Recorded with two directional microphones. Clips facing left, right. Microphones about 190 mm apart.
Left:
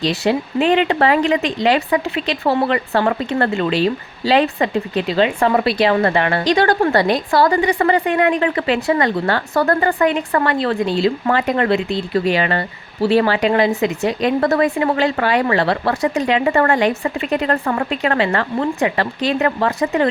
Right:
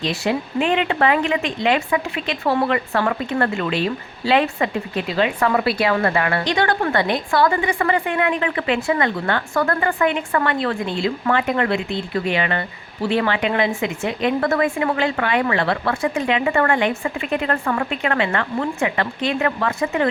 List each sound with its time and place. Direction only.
0.3 s speech: 30° left (ahead or behind)